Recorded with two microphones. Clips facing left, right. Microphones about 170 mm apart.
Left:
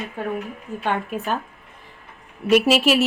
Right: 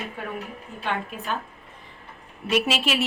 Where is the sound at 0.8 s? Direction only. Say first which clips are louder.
Left 5 dB; 45° left (ahead or behind).